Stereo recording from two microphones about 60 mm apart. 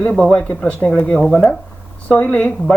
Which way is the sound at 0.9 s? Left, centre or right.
Left.